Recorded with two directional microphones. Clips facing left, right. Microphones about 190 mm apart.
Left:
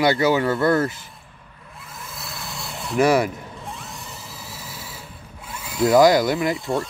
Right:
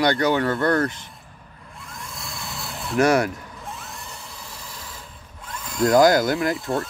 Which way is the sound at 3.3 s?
25° left (ahead or behind).